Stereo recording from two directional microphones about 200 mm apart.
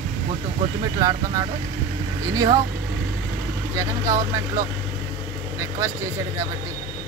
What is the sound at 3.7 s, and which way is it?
Speech, 15° right (ahead or behind).